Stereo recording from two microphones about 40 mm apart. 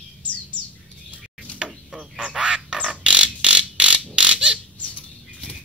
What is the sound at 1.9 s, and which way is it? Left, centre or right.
Duck, centre.